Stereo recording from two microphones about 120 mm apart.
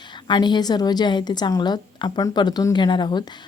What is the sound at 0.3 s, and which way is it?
A woman's voice, 40° left (ahead or behind).